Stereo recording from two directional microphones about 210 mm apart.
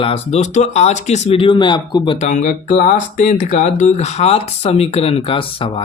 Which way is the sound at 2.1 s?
35° left (ahead or behind).